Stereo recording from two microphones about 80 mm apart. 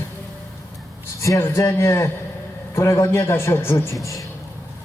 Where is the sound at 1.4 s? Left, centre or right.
Left.